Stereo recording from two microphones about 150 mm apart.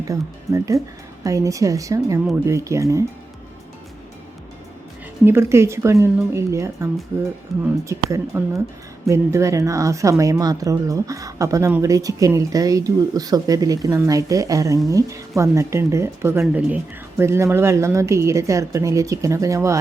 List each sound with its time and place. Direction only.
0.1 s speech: 20° right (ahead or behind)
5.2 s speech: 15° right (ahead or behind)